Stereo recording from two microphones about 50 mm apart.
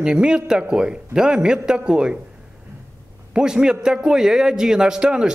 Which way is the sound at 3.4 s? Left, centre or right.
Centre.